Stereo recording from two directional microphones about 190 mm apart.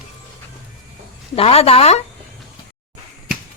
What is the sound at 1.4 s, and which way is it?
Speech, 30° left (ahead or behind).